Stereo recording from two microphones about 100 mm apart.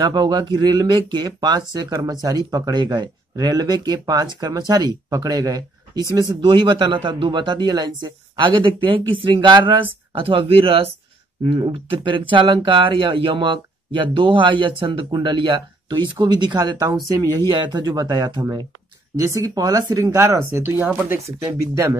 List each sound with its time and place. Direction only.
0.0 s speech: 45° right (ahead or behind)
6.4 s speech: 55° right (ahead or behind); by 10.9 s 75° right (ahead or behind)
11.4 s speech: 60° right (ahead or behind); by 18.7 s 45° right (ahead or behind)
19.1 s speech: 30° right (ahead or behind)
20.3 s speech: 25° right (ahead or behind)